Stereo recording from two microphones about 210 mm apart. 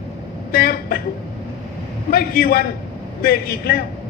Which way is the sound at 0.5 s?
45° left (ahead or behind).